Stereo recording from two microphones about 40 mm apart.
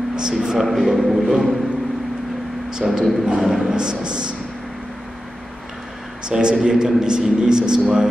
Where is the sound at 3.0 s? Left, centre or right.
Centre.